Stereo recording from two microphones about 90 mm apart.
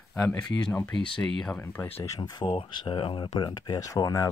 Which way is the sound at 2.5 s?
70° left (ahead or behind).